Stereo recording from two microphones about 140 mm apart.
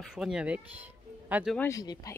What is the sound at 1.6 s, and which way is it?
Speech, 25° left (ahead or behind).